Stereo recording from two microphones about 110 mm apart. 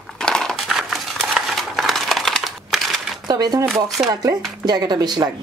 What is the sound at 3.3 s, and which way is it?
Shuffling cards, 35° right (ahead or behind).